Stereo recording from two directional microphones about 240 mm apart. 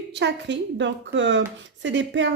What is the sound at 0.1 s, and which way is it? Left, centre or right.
A woman's voice, right.